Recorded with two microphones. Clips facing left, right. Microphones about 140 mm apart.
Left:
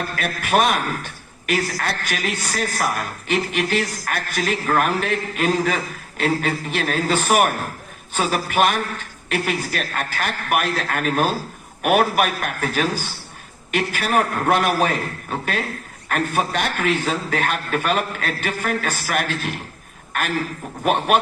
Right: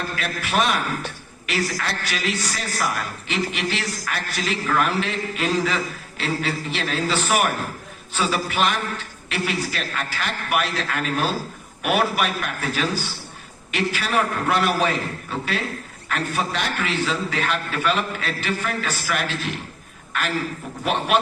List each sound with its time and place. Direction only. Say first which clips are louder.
0.2 s a man's voice: left 4 dB; 50° left (ahead or behind)